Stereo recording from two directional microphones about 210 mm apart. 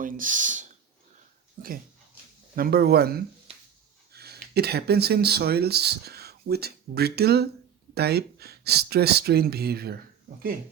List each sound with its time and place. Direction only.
0.0 s speech: 40° right (ahead or behind)